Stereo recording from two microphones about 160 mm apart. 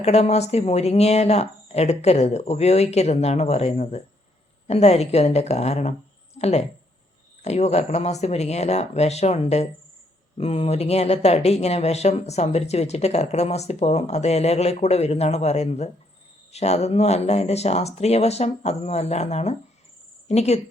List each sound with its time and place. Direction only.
0.0 s speech: 40° left (ahead or behind)